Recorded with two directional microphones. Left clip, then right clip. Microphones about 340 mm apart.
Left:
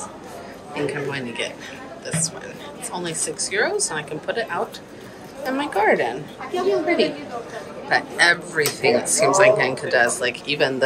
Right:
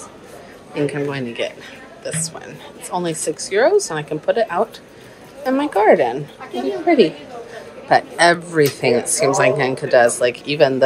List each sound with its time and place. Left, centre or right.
0.7 s speech: centre